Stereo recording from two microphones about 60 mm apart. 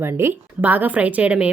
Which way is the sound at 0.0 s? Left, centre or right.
Right.